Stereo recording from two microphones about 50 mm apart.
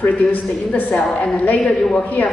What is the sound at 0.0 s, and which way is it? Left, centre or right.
Speech, left.